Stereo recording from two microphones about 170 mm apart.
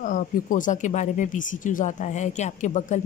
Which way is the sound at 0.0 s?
50° left (ahead or behind).